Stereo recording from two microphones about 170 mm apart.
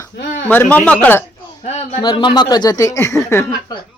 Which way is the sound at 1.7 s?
40° left (ahead or behind).